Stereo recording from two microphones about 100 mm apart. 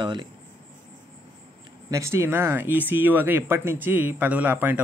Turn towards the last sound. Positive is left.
turn(degrees=-20)  # may be behind; listen again after turning